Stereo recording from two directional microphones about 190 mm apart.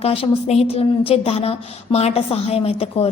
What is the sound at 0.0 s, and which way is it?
A woman's voice, 30° left (ahead or behind).